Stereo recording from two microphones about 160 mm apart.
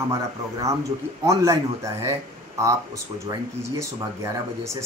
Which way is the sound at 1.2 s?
20° right (ahead or behind).